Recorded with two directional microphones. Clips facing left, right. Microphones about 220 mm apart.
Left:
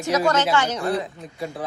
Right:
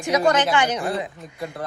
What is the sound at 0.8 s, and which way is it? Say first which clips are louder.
Speech: left 2 dB; centre (ahead or behind).